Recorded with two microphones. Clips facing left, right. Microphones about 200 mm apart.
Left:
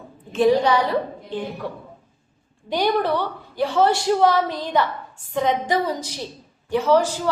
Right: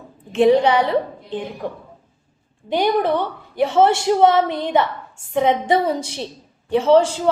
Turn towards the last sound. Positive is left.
turn(degrees=-25)  # may be behind; listen again after turning